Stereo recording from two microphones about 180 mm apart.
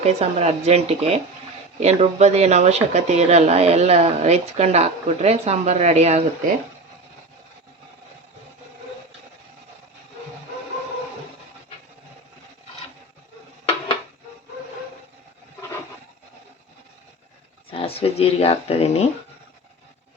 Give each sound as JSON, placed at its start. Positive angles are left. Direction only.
{"t": 0.0, "sound": "speech", "side_deg": -35}
{"t": 17.7, "sound": "speech", "side_deg": 30}